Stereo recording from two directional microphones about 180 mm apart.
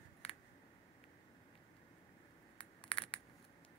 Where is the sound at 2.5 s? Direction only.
30° left (ahead or behind).